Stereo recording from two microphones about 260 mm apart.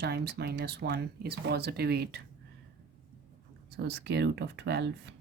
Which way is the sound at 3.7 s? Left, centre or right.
Right.